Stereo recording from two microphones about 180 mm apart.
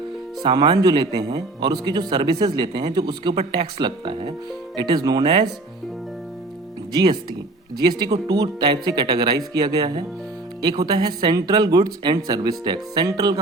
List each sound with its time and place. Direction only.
0.4 s speech: 25° right (ahead or behind)
6.9 s speech: 25° right (ahead or behind)